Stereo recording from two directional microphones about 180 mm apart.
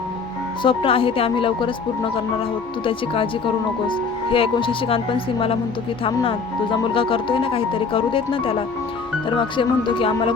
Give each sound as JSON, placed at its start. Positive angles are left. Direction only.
{"t": 0.6, "sound": "speech", "side_deg": 30}
{"t": 2.8, "sound": "speech", "side_deg": 30}